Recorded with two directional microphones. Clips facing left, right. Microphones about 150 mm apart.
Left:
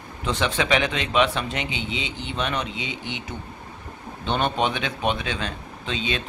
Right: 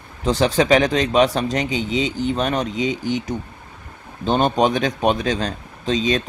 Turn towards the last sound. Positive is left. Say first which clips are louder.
# right 8 dB
turn(degrees=-40)  # may be behind; listen again after turning